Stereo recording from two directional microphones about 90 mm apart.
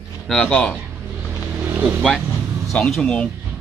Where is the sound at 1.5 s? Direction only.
25° right (ahead or behind).